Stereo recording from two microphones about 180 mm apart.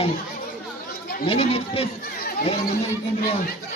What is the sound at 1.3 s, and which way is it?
Speech, 35° left (ahead or behind).